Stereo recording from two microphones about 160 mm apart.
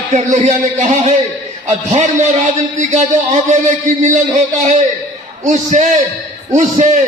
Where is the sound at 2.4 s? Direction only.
45° right (ahead or behind).